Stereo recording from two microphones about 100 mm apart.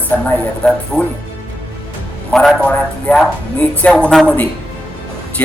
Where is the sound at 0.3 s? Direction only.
10° left (ahead or behind).